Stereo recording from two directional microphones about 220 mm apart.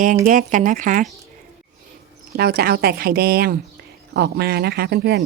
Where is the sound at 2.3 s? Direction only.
45° right (ahead or behind).